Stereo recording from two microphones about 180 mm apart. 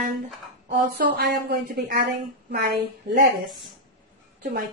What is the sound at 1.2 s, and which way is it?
Speech, 60° right (ahead or behind).